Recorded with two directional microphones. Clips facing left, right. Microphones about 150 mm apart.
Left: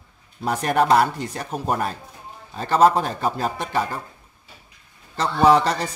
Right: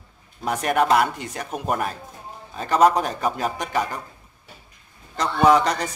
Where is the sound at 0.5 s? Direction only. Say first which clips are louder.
Left 1 dB; 35° left (ahead or behind).